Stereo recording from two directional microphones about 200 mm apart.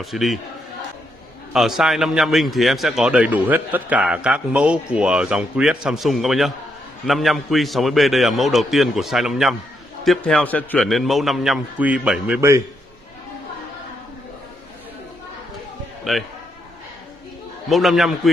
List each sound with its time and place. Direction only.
0.0 s a man's voice: centre (ahead or behind)
1.5 s a man's voice: centre (ahead or behind)
16.0 s a man's voice: centre (ahead or behind)
17.6 s a man's voice: centre (ahead or behind)